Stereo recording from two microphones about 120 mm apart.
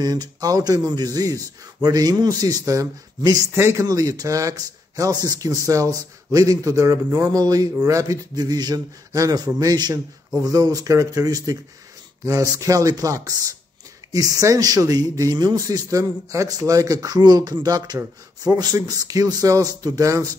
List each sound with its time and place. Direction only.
0.0 s a man's voice: 30° right (ahead or behind)